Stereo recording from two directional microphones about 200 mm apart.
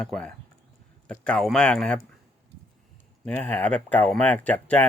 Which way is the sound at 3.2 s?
5° left (ahead or behind).